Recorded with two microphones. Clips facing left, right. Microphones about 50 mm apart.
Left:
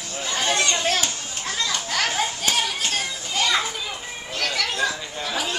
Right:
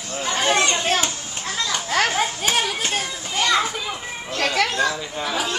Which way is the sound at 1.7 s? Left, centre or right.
Right.